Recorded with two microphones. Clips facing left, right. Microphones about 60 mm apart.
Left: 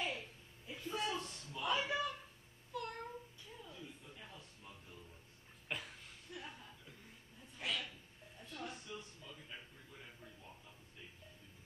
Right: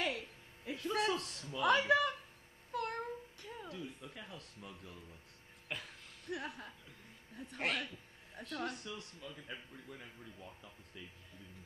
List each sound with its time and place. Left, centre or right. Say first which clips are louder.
0.7 s a sound: right 6 dB; right
2.7 s cat: right 5 dB; right
5.7 s speech: even; centre
6.2 s speech: right 9 dB; right
8.4 s speech: right 7 dB; right